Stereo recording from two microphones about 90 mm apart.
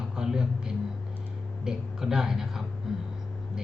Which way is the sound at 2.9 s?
5° right (ahead or behind).